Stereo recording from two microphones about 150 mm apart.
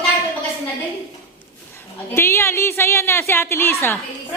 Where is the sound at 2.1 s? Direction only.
15° left (ahead or behind).